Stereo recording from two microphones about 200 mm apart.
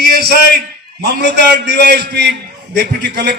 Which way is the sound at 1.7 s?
40° left (ahead or behind).